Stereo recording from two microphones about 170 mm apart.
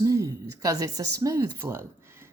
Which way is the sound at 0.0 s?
20° right (ahead or behind).